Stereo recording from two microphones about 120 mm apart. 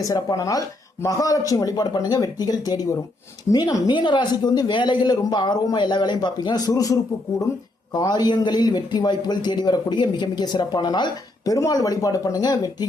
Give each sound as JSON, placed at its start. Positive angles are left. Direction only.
{"t": 0.0, "sound": "speech", "side_deg": 30}